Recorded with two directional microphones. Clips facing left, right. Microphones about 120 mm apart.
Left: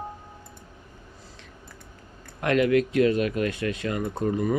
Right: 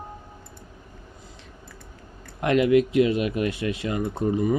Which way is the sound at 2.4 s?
20° right (ahead or behind).